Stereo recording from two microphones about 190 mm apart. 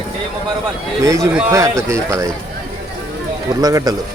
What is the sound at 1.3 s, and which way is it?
Speech, 5° right (ahead or behind).